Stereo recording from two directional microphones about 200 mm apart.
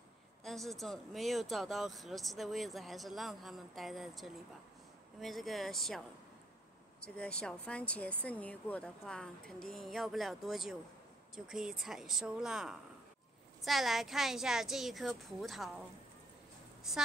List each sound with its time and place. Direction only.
0.4 s speech: centre (ahead or behind)
7.2 s speech: 5° left (ahead or behind)